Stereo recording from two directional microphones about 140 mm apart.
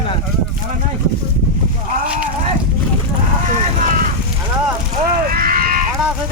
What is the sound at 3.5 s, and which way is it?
Vehicle, 75° right (ahead or behind).